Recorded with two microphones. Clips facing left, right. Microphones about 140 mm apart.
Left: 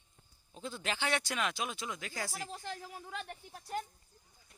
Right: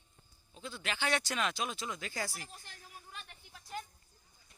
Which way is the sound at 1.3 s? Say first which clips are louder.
Even; 10° left (ahead or behind).